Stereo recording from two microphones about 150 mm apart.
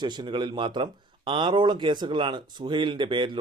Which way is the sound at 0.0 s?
30° right (ahead or behind).